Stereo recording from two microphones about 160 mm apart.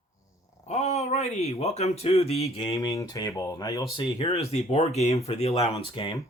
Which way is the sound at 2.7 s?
20° left (ahead or behind).